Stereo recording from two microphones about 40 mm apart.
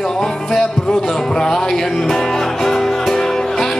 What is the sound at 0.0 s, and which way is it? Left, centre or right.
Music, centre.